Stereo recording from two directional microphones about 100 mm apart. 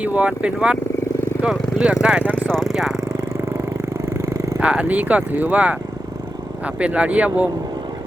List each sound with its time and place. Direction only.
0.0 s speech: 15° right (ahead or behind)
2.5 s speech: 5° left (ahead or behind)
4.3 s roar: 35° right (ahead or behind)
4.6 s speech: 10° right (ahead or behind)
6.7 s speech: 10° right (ahead or behind)